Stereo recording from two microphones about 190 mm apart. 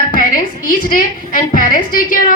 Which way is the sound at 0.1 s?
45° left (ahead or behind).